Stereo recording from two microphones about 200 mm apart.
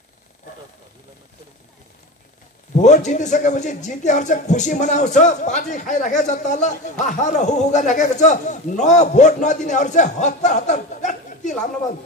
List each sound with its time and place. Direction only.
2.7 s a man's voice: 35° left (ahead or behind)